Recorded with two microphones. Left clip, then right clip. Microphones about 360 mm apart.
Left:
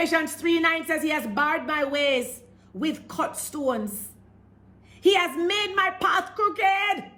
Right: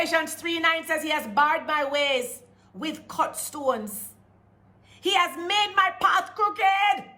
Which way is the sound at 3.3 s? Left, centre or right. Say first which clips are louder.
Right 1 dB; right.